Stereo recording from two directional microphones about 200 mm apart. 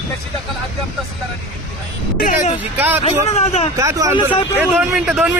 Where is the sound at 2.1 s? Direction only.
40° left (ahead or behind).